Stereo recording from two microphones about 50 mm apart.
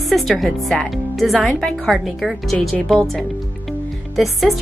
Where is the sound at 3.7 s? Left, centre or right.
Centre.